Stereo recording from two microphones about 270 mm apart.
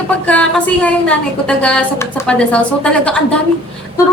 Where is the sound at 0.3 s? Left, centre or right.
Centre.